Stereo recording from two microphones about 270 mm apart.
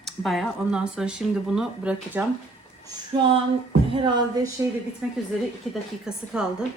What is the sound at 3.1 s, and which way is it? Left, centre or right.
Speech, centre.